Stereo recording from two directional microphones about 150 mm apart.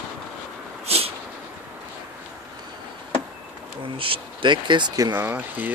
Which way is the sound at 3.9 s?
35° right (ahead or behind).